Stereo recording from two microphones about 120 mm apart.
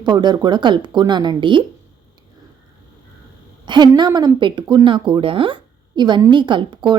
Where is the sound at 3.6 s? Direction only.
40° right (ahead or behind).